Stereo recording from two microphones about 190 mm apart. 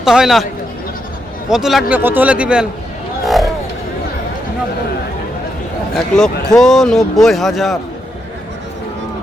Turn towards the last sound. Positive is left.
turn(degrees=0)  # may be behind; listen again after turning